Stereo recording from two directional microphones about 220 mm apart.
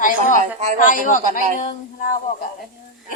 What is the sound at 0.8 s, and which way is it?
Speech, 35° left (ahead or behind).